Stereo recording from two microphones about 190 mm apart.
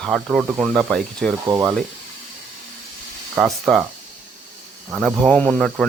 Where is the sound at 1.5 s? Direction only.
15° right (ahead or behind).